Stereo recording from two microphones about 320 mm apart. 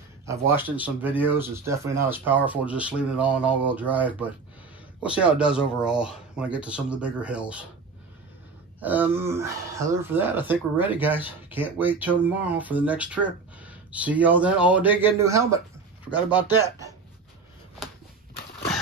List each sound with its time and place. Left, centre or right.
0.3 s speech: centre
8.8 s speech: centre